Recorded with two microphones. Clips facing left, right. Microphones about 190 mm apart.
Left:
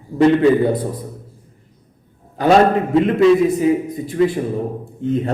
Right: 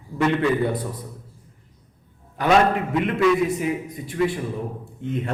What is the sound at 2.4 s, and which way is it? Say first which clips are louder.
A man's voice: left 5 dB; 35° left (ahead or behind).